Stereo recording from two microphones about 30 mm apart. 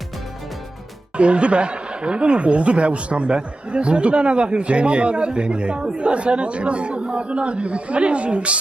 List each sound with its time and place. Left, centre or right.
1.1 s speech: right